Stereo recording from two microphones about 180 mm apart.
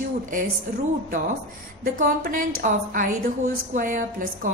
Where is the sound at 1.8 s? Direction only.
50° right (ahead or behind).